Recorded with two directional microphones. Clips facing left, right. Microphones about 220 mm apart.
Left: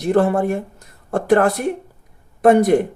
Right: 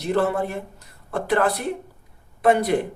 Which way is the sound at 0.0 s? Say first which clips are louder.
Left 6 dB; 50° left (ahead or behind).